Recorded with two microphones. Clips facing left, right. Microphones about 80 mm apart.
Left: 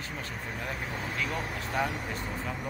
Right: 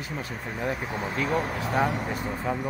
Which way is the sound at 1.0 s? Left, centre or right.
Right.